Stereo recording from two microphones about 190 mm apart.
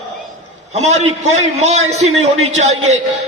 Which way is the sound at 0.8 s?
35° right (ahead or behind).